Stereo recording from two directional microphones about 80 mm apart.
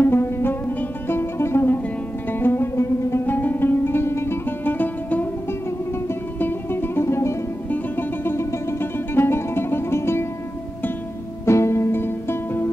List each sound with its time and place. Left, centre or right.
0.0 s music: left
7.7 s music: left
11.4 s music: left